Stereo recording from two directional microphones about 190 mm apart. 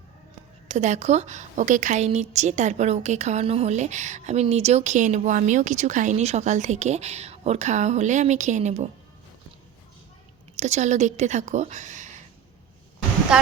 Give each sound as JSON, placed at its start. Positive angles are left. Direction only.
{"t": 0.7, "sound": "a woman's voice", "side_deg": -35}
{"t": 10.6, "sound": "a woman's voice", "side_deg": -35}
{"t": 13.3, "sound": "speech", "side_deg": -5}